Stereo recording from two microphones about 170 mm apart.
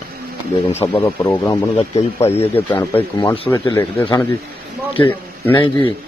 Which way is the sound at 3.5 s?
15° left (ahead or behind).